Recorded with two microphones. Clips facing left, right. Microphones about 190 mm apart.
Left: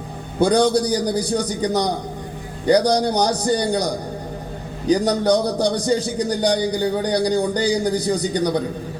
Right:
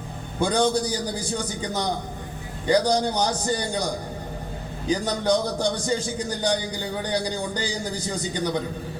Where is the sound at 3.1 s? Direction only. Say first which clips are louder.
Left 6 dB; 35° left (ahead or behind).